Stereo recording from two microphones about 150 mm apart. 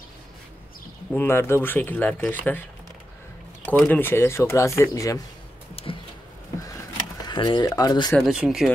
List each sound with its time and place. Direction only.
1.1 s speech: 15° left (ahead or behind)
3.6 s speech: 10° left (ahead or behind)
5.8 s a sound: 40° left (ahead or behind)
7.2 s speech: 30° left (ahead or behind)
8.1 s speech: 5° right (ahead or behind)